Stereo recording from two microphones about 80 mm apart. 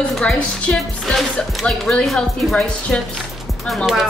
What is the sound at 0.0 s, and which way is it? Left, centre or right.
Speech, centre.